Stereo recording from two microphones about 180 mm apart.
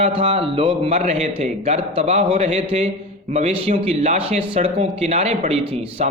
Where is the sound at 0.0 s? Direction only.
30° right (ahead or behind).